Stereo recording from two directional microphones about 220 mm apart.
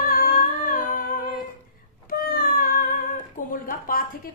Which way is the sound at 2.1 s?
40° left (ahead or behind).